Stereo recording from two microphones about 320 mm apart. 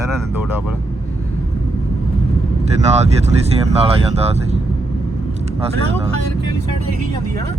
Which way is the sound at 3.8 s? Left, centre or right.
Centre.